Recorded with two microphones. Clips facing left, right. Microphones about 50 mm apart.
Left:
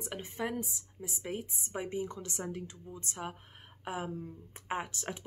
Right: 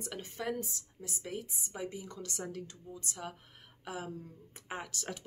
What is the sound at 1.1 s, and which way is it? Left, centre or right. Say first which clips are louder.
A woman's voice: left 2 dB; left.